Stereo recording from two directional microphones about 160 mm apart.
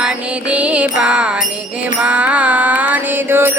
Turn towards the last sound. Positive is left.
turn(degrees=-15)  # may be behind; listen again after turning